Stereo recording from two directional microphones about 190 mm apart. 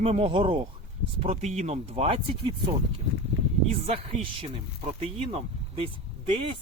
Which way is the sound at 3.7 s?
30° right (ahead or behind).